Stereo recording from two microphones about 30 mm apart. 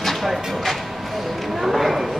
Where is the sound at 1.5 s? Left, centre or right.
Centre.